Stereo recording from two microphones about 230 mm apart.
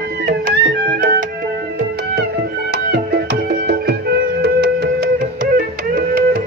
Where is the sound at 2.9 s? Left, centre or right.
Right.